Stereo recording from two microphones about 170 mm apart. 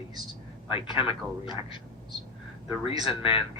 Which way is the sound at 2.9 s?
30° left (ahead or behind).